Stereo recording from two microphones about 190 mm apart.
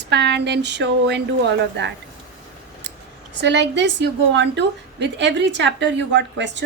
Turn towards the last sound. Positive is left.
turn(degrees=-70)  # may be behind; listen again after turning